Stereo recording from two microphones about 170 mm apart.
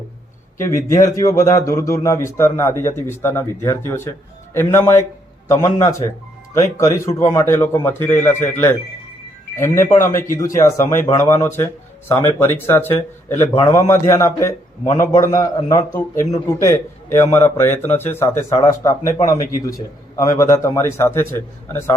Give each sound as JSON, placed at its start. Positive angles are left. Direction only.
{"t": 0.6, "sound": "a man's voice", "side_deg": 15}